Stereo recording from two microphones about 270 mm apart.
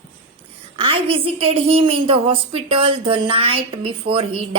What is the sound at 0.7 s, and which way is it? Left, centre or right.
Speech, centre.